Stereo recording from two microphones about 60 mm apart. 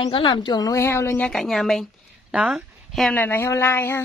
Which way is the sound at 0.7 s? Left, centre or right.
Left.